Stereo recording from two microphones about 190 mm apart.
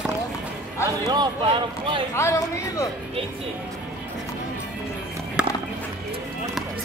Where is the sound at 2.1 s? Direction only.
15° left (ahead or behind).